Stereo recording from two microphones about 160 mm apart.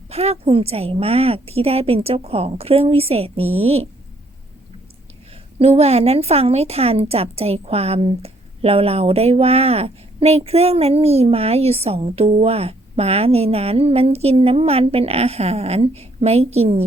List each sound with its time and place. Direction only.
0.1 s a woman's voice: 40° right (ahead or behind)
5.5 s a woman's voice: 40° right (ahead or behind)